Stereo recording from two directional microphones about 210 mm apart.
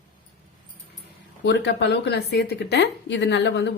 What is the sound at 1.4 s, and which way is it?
Speech, 55° left (ahead or behind).